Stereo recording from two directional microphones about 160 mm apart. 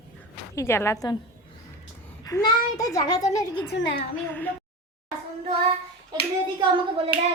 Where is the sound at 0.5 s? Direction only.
15° left (ahead or behind).